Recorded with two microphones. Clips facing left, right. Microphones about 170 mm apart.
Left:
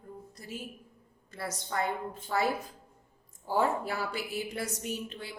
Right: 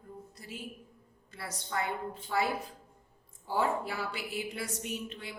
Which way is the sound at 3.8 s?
45° left (ahead or behind).